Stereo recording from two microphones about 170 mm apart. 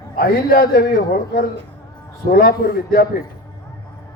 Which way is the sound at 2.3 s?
60° left (ahead or behind).